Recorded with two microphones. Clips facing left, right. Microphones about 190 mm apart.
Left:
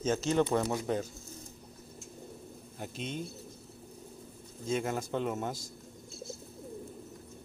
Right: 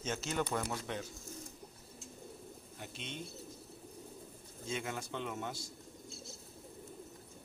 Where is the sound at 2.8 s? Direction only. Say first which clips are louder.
Left 8 dB; 45° left (ahead or behind).